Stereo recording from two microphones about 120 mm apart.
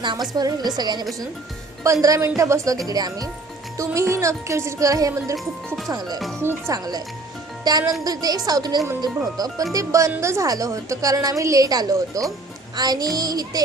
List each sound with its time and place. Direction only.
0.0 s a woman's voice: 35° right (ahead or behind)
5.6 s speech: centre (ahead or behind)
5.9 s a woman's voice: 35° right (ahead or behind)